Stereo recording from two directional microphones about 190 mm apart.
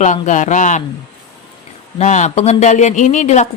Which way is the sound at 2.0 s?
40° left (ahead or behind).